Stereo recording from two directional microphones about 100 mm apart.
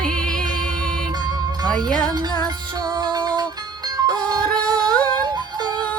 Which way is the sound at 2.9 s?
45° right (ahead or behind).